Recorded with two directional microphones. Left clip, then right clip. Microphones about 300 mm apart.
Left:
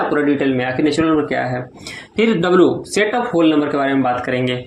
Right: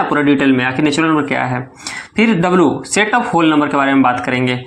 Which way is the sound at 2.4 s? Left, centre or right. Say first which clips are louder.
Left 1 dB; right.